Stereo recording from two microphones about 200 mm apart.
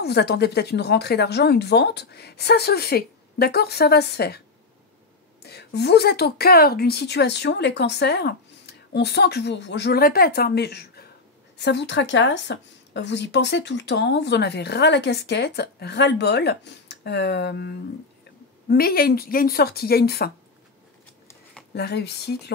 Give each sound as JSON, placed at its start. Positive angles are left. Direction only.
{"t": 0.0, "sound": "speech", "side_deg": 55}
{"t": 5.4, "sound": "speech", "side_deg": 55}
{"t": 21.7, "sound": "speech", "side_deg": 55}